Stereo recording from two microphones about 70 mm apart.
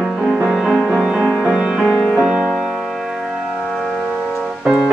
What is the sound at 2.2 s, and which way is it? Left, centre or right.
Music, centre.